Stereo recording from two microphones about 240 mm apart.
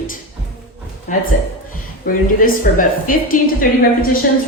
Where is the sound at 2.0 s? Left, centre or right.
Left.